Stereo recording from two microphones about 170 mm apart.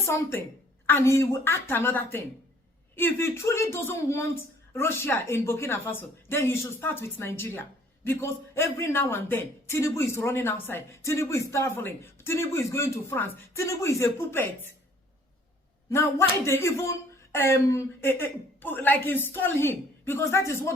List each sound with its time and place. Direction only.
0.0 s speech: 15° left (ahead or behind)
15.9 s speech: 15° left (ahead or behind)